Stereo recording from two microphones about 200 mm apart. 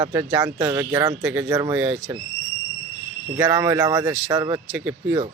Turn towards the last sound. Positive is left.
turn(degrees=-10)  # may be behind; listen again after turning